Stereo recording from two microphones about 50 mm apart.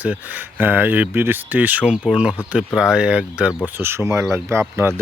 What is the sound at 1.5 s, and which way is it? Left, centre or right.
Speech, right.